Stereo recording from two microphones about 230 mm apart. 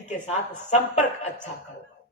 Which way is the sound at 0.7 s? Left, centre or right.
Left.